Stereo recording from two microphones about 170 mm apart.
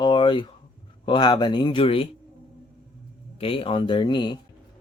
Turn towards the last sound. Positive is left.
turn(degrees=25)  # may be behind; listen again after turning